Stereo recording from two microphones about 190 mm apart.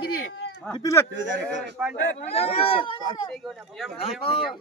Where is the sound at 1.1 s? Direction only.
75° right (ahead or behind).